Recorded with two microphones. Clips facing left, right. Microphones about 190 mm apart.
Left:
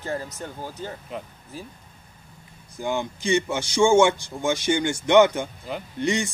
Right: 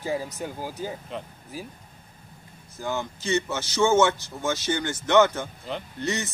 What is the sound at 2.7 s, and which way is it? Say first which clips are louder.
A man's voice: left 3 dB; 15° left (ahead or behind).